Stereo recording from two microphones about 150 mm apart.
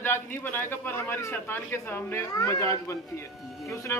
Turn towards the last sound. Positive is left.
turn(degrees=20)  # may be behind; listen again after turning